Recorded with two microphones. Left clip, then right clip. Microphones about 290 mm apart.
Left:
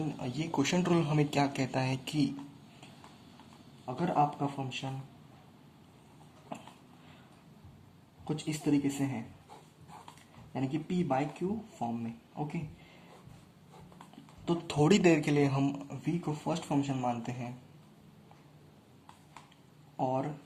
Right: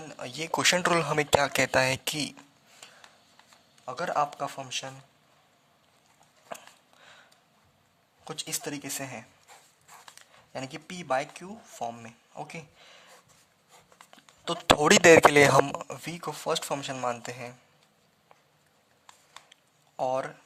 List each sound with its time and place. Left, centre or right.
0.2 s a man's voice: right
3.8 s a man's voice: right
8.2 s a man's voice: right
10.5 s a man's voice: right
14.4 s a man's voice: right
20.0 s a man's voice: right